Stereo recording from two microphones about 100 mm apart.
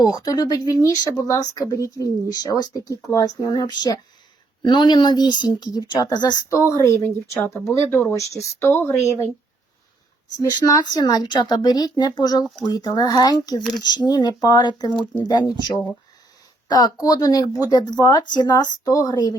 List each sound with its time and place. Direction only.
0.0 s speech: 40° left (ahead or behind)
6.6 s speech: 30° left (ahead or behind)
10.3 s speech: 45° left (ahead or behind)